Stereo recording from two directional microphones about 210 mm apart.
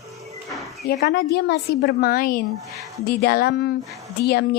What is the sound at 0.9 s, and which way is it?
A woman's voice, 50° left (ahead or behind).